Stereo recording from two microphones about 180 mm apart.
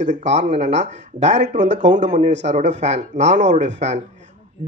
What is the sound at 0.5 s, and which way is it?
A man's voice, 40° right (ahead or behind).